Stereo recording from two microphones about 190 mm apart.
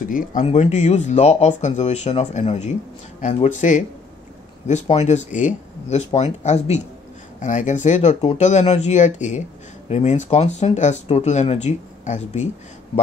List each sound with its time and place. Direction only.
0.1 s speech: 40° left (ahead or behind)